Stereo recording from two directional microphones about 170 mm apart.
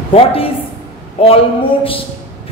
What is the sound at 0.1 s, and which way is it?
A woman's voice, 35° left (ahead or behind).